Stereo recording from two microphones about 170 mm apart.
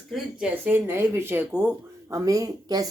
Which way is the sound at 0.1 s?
5° right (ahead or behind).